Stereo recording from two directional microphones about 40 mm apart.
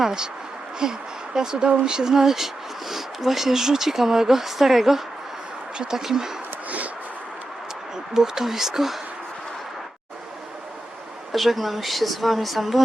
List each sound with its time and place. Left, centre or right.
0.0 s speech: centre
5.7 s speech: right
6.7 s a sound: right
8.1 s speech: centre
11.3 s speech: centre